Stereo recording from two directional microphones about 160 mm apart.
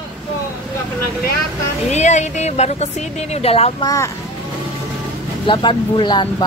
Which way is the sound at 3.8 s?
20° left (ahead or behind).